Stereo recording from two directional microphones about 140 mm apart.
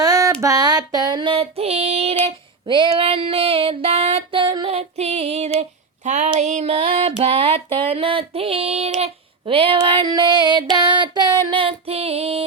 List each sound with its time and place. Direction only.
0.0 s a sound: 25° right (ahead or behind)
0.4 s female singing: 25° right (ahead or behind); by 5.6 s 50° right (ahead or behind)
6.1 s a sound: 55° right (ahead or behind)
6.4 s music: 55° right (ahead or behind)
9.5 s child singing: 40° right (ahead or behind)
11.3 s female singing: 30° right (ahead or behind)